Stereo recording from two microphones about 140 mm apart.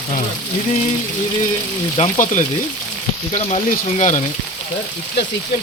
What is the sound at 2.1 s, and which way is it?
Speech, 65° left (ahead or behind).